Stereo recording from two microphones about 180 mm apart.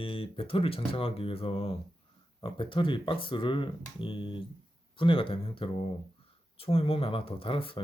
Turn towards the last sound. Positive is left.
turn(degrees=30)  # may be behind; listen again after turning